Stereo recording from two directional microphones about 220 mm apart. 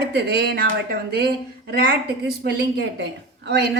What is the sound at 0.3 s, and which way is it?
A woman's voice, 45° right (ahead or behind).